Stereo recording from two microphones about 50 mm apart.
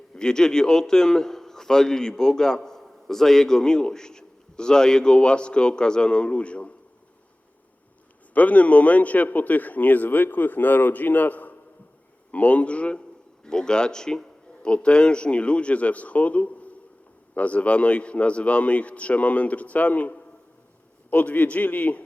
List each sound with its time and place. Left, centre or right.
0.1 s a man's voice: centre
8.3 s a man's voice: left